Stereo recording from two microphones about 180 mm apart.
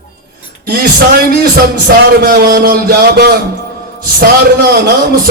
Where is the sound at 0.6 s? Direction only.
55° right (ahead or behind).